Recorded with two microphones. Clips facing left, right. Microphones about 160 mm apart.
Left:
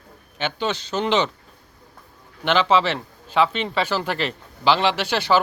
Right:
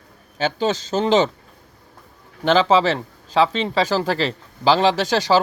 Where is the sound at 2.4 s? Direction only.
40° right (ahead or behind).